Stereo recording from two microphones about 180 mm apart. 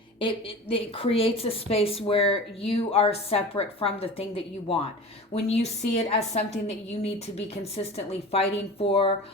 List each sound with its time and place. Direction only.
0.2 s a woman's voice: 30° left (ahead or behind)
5.3 s a woman's voice: 35° left (ahead or behind)